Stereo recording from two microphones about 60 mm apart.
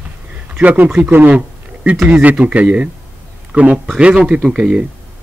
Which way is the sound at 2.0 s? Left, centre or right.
Right.